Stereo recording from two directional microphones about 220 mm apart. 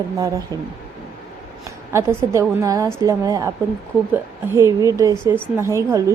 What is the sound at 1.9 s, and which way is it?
Speech, 15° right (ahead or behind).